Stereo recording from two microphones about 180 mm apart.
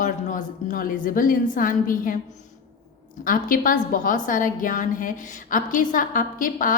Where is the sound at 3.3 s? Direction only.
50° left (ahead or behind).